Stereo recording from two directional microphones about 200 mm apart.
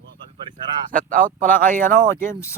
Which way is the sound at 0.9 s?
45° right (ahead or behind).